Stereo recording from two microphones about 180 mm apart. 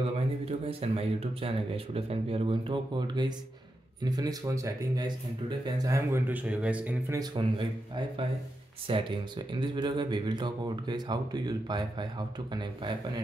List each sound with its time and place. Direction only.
0.0 s speech: 35° right (ahead or behind); by 7.2 s 10° right (ahead or behind)
7.2 s speech: 25° right (ahead or behind)